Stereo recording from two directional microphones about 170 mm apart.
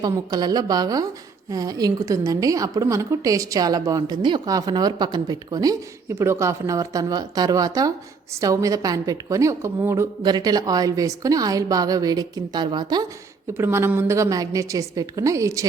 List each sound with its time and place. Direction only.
0.0 s a woman's voice: 25° right (ahead or behind)
13.6 s a woman's voice: 15° right (ahead or behind)